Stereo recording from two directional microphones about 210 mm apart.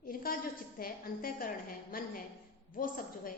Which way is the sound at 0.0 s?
45° left (ahead or behind).